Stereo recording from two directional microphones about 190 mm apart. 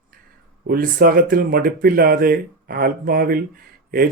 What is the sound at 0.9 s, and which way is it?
Speech, 50° right (ahead or behind).